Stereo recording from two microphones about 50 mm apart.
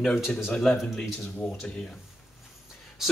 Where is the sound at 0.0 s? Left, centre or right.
Centre.